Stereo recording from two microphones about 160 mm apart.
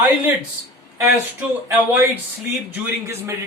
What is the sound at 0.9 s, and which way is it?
A man's voice, 15° right (ahead or behind).